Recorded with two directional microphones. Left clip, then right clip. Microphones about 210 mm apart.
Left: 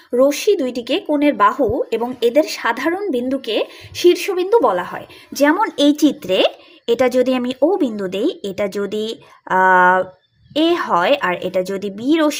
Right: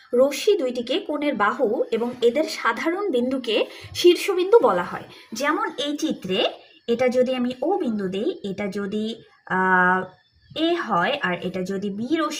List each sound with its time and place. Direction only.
0.2 s a woman's voice: 30° left (ahead or behind); by 12.2 s 50° left (ahead or behind)